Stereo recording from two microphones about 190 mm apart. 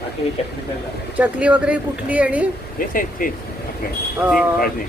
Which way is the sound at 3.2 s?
45° left (ahead or behind).